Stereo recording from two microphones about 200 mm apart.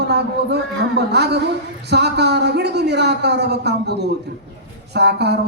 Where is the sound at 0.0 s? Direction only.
55° right (ahead or behind).